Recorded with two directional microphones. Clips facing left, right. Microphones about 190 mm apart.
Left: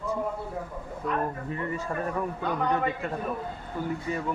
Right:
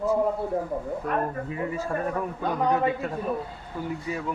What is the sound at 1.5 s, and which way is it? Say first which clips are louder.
Speech: right 2 dB; 5° right (ahead or behind).